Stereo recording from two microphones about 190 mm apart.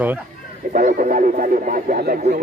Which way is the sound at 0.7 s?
40° right (ahead or behind).